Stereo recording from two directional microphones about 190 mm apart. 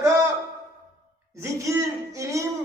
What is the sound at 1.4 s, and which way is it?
A man's voice, 15° right (ahead or behind).